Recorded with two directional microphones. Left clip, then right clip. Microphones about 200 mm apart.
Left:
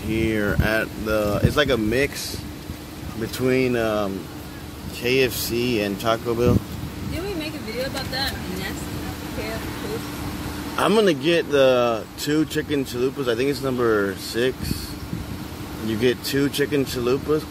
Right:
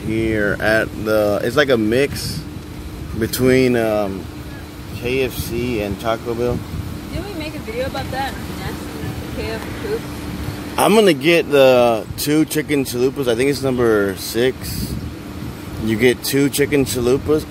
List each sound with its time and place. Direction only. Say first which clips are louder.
0.1 s speech: right 4 dB; 5° right (ahead or behind)
0.6 s speech: right 6 dB; 15° right (ahead or behind)
3.2 s speech: right 6 dB; 25° right (ahead or behind)
3.8 s speech: right 5 dB; 5° right (ahead or behind)
5.0 s speech: even; 15° left (ahead or behind)
10.8 s speech: right 6 dB; 15° right (ahead or behind)
16.0 s speech: right 5 dB; 15° right (ahead or behind)